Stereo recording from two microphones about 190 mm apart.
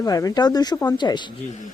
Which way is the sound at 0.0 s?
20° left (ahead or behind).